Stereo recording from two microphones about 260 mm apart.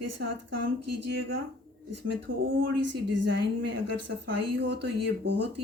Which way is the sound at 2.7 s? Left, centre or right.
Right.